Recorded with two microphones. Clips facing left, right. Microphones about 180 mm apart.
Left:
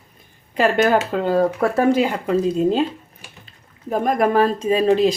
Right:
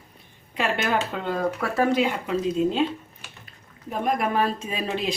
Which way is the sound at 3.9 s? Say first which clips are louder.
Left 7 dB; 40° left (ahead or behind).